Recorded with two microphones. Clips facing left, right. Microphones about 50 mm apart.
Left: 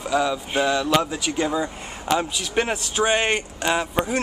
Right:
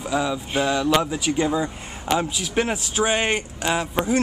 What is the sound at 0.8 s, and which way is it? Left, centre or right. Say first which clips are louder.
Speech: right 1 dB; centre.